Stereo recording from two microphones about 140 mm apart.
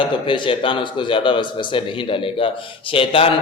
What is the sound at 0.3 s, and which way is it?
A man's voice, 35° left (ahead or behind).